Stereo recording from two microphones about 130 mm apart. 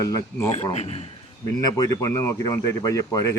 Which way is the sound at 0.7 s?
55° left (ahead or behind).